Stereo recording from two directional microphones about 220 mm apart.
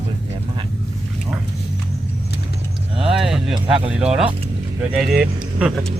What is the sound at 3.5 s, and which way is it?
Speech, 25° right (ahead or behind).